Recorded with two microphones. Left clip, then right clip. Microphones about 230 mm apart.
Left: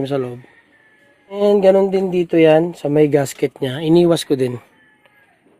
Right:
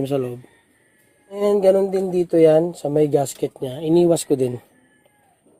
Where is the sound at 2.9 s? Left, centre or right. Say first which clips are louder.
Left 4 dB; left.